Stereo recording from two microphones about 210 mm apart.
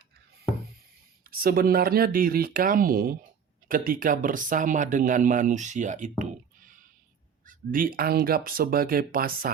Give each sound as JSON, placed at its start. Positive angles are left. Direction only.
{"t": 1.3, "sound": "speech", "side_deg": -45}
{"t": 7.4, "sound": "speech", "side_deg": -40}